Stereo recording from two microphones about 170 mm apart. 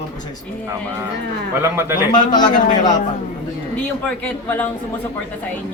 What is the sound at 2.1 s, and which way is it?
Speech, 25° left (ahead or behind).